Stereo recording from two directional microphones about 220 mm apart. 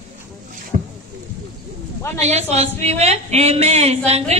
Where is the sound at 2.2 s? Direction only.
30° right (ahead or behind).